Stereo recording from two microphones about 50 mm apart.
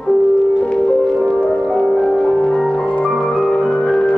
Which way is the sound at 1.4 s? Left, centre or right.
Centre.